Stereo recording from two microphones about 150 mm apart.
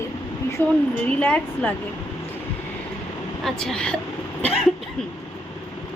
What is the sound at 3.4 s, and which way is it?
Speech, 5° left (ahead or behind).